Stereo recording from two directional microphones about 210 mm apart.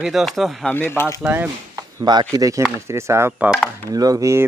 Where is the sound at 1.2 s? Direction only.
10° right (ahead or behind).